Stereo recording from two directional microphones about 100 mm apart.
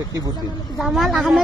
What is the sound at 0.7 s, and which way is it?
Crowd, centre (ahead or behind).